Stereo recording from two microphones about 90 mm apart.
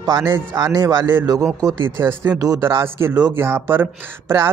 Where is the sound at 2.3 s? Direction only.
45° right (ahead or behind).